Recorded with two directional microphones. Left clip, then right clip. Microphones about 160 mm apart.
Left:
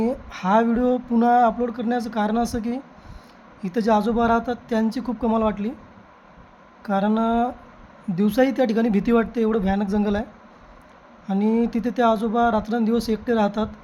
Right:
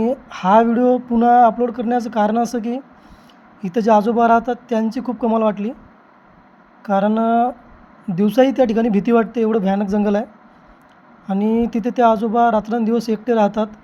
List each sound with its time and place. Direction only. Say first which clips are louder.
0.0 s speech: right 6 dB; 15° right (ahead or behind)
6.8 s speech: right 5 dB; 15° right (ahead or behind)
11.3 s speech: right 3 dB; 15° right (ahead or behind)